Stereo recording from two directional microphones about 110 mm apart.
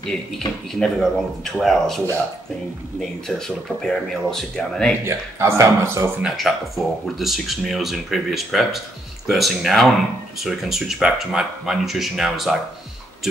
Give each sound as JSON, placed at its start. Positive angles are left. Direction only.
{"t": 0.7, "sound": "speech", "side_deg": 5}
{"t": 3.3, "sound": "speech", "side_deg": 5}
{"t": 5.0, "sound": "speech", "side_deg": -25}
{"t": 6.2, "sound": "speech", "side_deg": 0}